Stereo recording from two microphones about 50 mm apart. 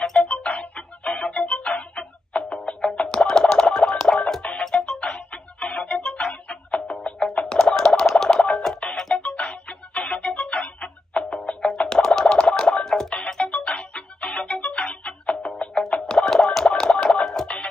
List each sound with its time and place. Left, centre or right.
0.0 s music: centre
1.8 s music: left
2.8 s music: centre
6.3 s music: left
7.5 s a sound: centre
8.1 s music: centre